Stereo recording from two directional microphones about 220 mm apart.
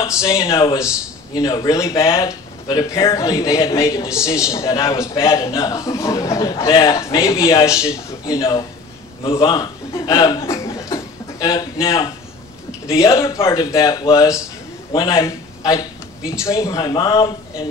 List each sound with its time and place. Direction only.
0.2 s a man's voice: 15° left (ahead or behind)